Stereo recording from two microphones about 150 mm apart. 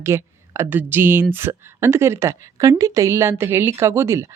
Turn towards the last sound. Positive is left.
turn(degrees=-20)  # may be behind; listen again after turning